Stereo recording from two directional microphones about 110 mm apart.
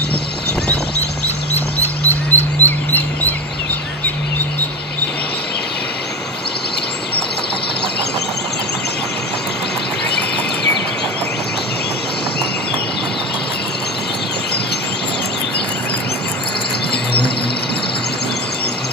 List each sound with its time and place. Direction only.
2.0 s bird: 15° left (ahead or behind)